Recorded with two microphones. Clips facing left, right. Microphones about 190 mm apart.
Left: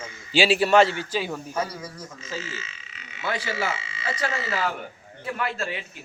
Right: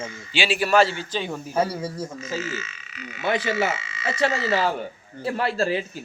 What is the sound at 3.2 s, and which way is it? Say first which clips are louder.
Speech: right 5 dB; 20° right (ahead or behind).